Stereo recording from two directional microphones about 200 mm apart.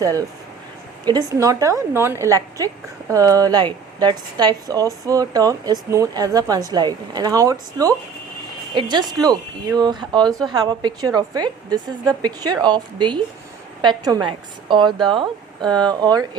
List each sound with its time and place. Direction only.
0.0 s a woman's voice: 15° right (ahead or behind)